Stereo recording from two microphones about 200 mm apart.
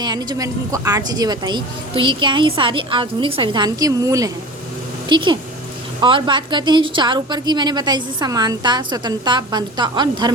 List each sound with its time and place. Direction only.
0.0 s a woman's voice: 20° right (ahead or behind)